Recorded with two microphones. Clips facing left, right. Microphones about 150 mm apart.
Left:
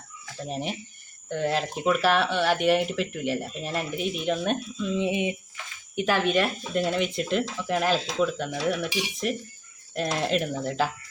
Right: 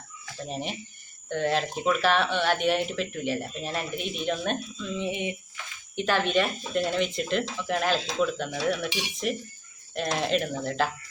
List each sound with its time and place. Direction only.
0.4 s speech: 5° left (ahead or behind)
4.8 s speech: 15° left (ahead or behind)
6.0 s speech: 5° left (ahead or behind)